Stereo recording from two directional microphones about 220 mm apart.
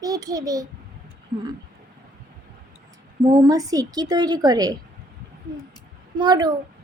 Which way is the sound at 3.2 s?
15° right (ahead or behind).